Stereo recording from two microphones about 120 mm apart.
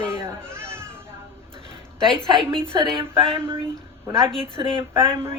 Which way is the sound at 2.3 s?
45° right (ahead or behind).